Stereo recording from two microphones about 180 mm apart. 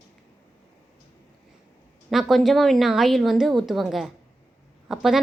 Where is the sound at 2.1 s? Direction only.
Centre (ahead or behind).